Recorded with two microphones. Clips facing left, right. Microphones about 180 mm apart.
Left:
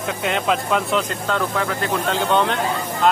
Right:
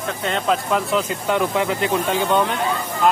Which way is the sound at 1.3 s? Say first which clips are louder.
Right 5 dB; 15° right (ahead or behind).